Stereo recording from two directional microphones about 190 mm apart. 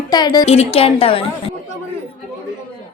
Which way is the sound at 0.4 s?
30° left (ahead or behind).